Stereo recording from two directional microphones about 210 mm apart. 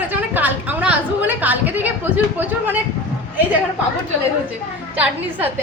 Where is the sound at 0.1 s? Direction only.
10° right (ahead or behind).